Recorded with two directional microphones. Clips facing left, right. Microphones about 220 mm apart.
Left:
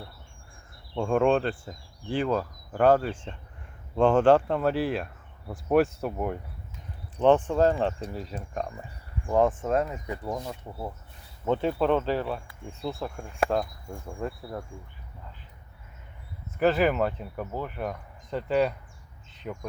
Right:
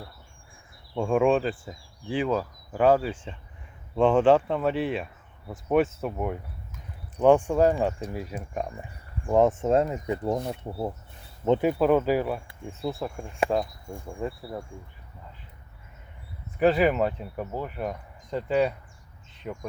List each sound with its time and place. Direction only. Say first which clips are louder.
0.9 s speech: right 1 dB; 5° right (ahead or behind)
7.2 s speech: right 2 dB; 10° right (ahead or behind)
9.3 s speech: right 3 dB; 20° right (ahead or behind)
11.8 s speech: right 3 dB; 10° right (ahead or behind)
16.6 s speech: right 2 dB; centre (ahead or behind)
19.3 s a sound: right 1 dB; centre (ahead or behind)